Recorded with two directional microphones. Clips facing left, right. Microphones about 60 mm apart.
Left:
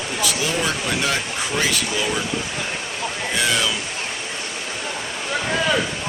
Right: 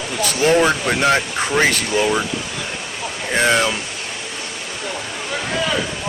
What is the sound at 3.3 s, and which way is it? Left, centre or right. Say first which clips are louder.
Speech: right 6 dB; right.